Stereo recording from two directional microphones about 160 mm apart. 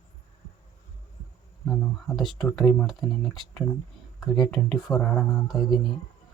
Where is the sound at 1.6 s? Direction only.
5° left (ahead or behind).